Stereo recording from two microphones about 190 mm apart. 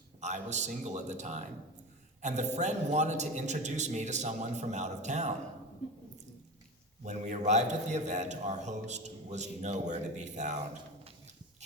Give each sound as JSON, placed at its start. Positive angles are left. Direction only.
{"t": 0.2, "sound": "a man's voice", "side_deg": -40}
{"t": 7.0, "sound": "a man's voice", "side_deg": -40}